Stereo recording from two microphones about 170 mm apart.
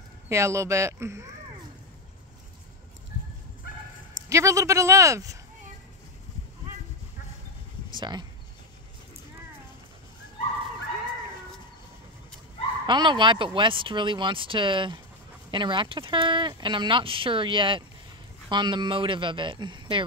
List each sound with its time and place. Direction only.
0.3 s speech: 15° right (ahead or behind)
4.3 s speech: 20° right (ahead or behind)
8.0 s speech: 25° right (ahead or behind)
12.8 s speech: 30° right (ahead or behind)